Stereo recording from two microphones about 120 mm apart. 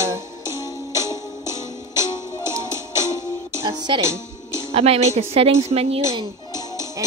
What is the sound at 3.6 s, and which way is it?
Music, 45° right (ahead or behind).